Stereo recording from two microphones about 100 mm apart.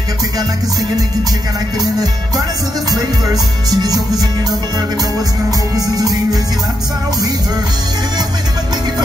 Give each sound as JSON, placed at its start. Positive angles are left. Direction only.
{"t": 1.8, "sound": "music", "side_deg": -40}
{"t": 3.7, "sound": "music", "side_deg": -40}
{"t": 5.8, "sound": "music", "side_deg": -35}